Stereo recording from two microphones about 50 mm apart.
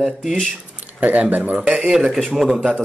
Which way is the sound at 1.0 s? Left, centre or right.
Right.